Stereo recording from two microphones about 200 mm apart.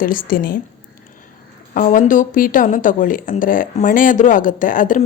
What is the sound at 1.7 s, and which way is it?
Speech, 40° left (ahead or behind).